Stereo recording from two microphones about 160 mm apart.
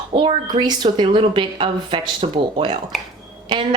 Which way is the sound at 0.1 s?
35° right (ahead or behind).